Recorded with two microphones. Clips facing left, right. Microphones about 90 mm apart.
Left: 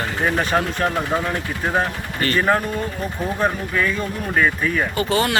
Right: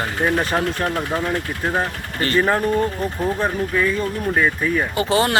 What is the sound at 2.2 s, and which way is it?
Speech, 30° right (ahead or behind).